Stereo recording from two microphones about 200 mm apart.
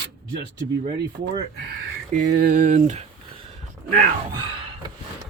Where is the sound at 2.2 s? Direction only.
45° right (ahead or behind).